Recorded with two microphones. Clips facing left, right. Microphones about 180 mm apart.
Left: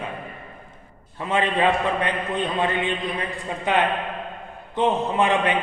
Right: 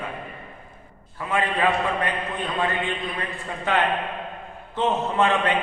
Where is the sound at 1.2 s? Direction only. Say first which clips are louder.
Left 2 dB; 25° left (ahead or behind).